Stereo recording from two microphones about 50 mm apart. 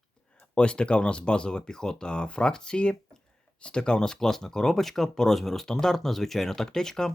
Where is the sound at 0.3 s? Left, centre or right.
Left.